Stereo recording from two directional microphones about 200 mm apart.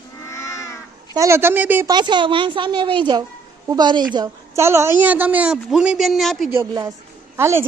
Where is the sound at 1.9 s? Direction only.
25° right (ahead or behind); by 6.5 s centre (ahead or behind).